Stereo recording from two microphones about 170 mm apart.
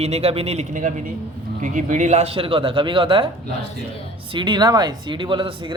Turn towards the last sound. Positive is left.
turn(degrees=-30)  # may be behind; listen again after turning